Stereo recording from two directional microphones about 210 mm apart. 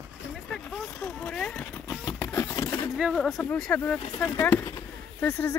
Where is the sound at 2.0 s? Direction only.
10° left (ahead or behind).